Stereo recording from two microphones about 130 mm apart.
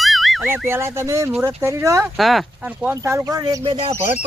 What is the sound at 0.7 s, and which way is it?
Speech, 20° right (ahead or behind).